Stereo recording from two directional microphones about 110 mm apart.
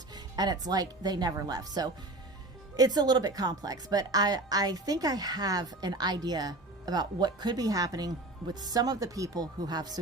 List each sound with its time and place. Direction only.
0.1 s a woman's voice: 35° right (ahead or behind)